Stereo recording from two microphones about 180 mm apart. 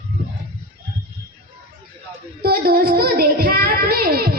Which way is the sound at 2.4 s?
55° right (ahead or behind).